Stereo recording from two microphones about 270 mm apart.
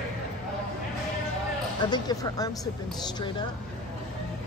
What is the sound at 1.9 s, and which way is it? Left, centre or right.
Speech, centre.